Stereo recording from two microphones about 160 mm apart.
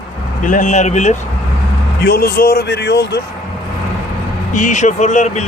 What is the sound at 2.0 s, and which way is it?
Speech, 70° left (ahead or behind).